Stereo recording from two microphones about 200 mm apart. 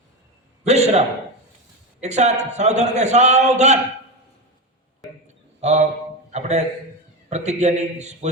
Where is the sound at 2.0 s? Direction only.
35° right (ahead or behind).